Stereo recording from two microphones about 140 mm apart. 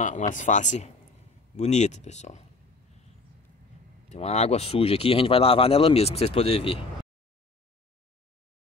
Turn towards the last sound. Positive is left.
turn(degrees=40)  # may be behind; listen again after turning